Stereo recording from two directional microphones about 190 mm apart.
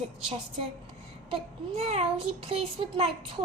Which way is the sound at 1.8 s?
30° right (ahead or behind).